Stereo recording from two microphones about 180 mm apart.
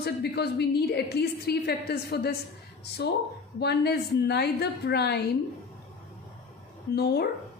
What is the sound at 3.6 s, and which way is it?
A woman's voice, 65° left (ahead or behind).